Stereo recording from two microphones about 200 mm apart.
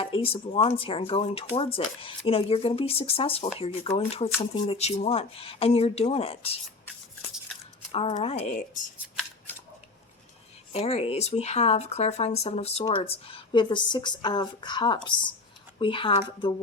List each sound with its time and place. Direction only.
0.0 s speech: 25° left (ahead or behind)
7.9 s speech: 30° left (ahead or behind)
10.7 s speech: 30° left (ahead or behind)